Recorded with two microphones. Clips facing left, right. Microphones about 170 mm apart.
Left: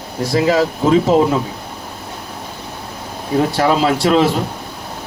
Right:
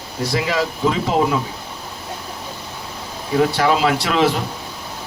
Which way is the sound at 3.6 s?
40° left (ahead or behind).